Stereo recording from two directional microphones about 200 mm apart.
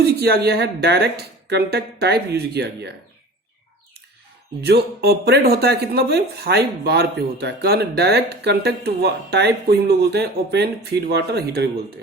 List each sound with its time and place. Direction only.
0.2 s speech: 55° right (ahead or behind)
4.6 s speech: 55° right (ahead or behind)